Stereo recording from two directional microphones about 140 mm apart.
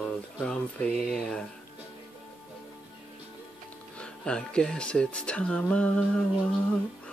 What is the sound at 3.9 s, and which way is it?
Speech, 5° left (ahead or behind).